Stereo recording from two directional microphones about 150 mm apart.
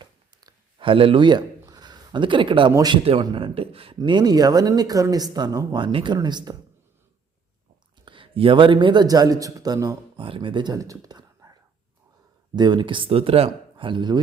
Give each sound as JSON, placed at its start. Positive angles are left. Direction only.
{"t": 0.0, "sound": "a sound", "side_deg": -30}
{"t": 2.7, "sound": "speech", "side_deg": -30}
{"t": 3.9, "sound": "speech", "side_deg": -30}
{"t": 8.0, "sound": "speech", "side_deg": -35}
{"t": 10.2, "sound": "speech", "side_deg": -35}
{"t": 12.5, "sound": "speech", "side_deg": -30}